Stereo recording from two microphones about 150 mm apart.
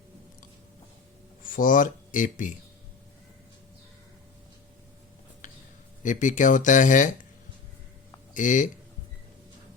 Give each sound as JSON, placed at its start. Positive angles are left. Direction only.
{"t": 1.5, "sound": "speech", "side_deg": 65}
{"t": 6.0, "sound": "speech", "side_deg": 60}
{"t": 8.3, "sound": "speech", "side_deg": 60}